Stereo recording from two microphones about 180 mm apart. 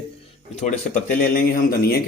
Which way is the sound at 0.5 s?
45° left (ahead or behind).